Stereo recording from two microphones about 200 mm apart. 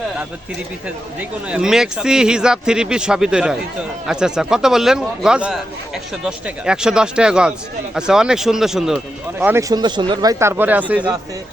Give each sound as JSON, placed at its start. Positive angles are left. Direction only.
{"t": 1.5, "sound": "speech", "side_deg": -5}